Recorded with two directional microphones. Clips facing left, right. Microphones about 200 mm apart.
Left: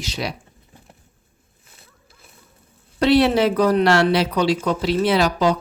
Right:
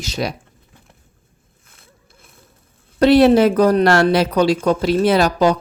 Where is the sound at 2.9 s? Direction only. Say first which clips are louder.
Right 5 dB; 45° right (ahead or behind).